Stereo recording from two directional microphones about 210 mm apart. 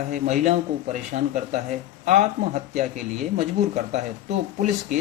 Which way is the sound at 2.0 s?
35° right (ahead or behind).